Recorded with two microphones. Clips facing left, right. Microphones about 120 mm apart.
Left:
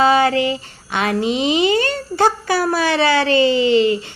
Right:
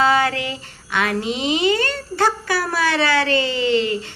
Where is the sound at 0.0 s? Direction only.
20° left (ahead or behind).